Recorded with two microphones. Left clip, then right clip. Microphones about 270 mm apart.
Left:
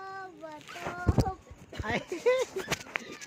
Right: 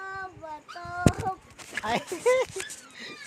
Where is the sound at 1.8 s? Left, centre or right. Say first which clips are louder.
Right 3 dB; right.